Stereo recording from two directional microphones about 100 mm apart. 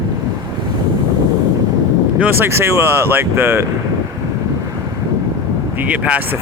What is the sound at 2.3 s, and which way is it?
Speech, 25° right (ahead or behind).